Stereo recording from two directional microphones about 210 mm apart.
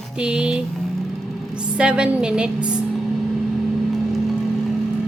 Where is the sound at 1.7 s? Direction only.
5° right (ahead or behind).